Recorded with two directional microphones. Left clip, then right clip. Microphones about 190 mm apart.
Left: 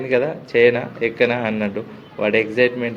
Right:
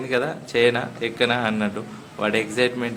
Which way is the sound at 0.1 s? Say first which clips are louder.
Left 5 dB; 5° left (ahead or behind).